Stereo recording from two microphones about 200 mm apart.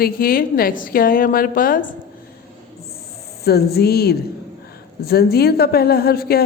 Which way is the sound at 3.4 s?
50° left (ahead or behind).